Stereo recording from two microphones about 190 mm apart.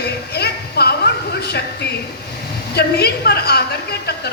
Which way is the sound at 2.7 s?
55° left (ahead or behind).